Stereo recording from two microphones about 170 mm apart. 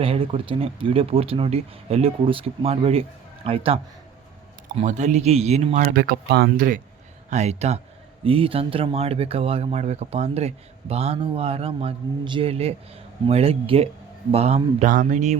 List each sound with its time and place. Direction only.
0.0 s speech: 35° right (ahead or behind)
4.8 s speech: 45° right (ahead or behind)
7.3 s speech: 40° right (ahead or behind)